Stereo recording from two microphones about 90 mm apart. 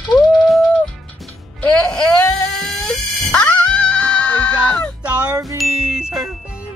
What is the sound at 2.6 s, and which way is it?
Music, 5° left (ahead or behind).